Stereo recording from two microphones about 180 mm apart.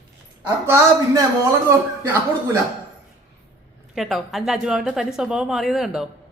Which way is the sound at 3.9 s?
Centre (ahead or behind).